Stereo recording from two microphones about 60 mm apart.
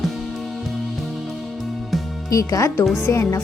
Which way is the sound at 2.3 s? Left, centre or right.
Left.